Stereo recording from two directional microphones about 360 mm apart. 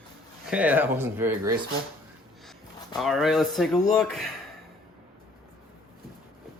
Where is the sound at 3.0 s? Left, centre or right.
Centre.